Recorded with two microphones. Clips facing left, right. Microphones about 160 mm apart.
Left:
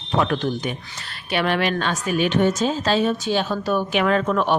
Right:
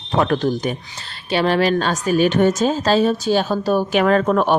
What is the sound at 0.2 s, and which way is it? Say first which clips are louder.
A woman's voice: right 4 dB; 40° right (ahead or behind).